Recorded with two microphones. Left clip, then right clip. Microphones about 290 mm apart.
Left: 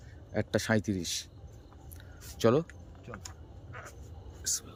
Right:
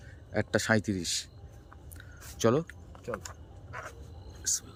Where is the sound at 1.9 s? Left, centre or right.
Centre.